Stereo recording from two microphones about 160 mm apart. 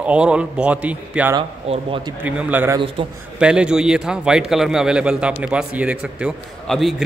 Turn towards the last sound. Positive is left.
turn(degrees=0)  # may be behind; listen again after turning